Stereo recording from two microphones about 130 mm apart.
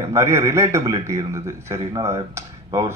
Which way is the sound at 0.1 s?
20° right (ahead or behind).